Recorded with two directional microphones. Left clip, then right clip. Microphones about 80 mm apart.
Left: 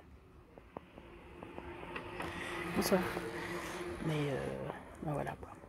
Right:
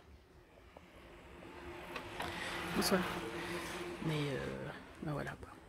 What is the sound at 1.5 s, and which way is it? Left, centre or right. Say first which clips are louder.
Vehicle: left 1 dB; centre.